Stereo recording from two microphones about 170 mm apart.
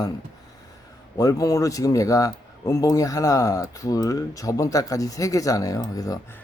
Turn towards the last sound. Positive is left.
turn(degrees=20)  # may be behind; listen again after turning